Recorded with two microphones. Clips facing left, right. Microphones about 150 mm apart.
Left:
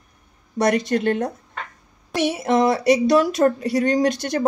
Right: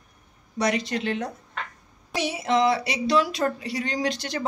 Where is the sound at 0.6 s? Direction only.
50° left (ahead or behind).